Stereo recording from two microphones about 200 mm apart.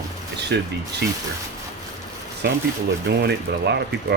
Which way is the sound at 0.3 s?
55° right (ahead or behind).